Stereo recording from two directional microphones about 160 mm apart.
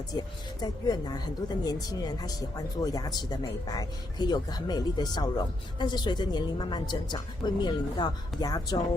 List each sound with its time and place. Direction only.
0.1 s speech: 25° left (ahead or behind)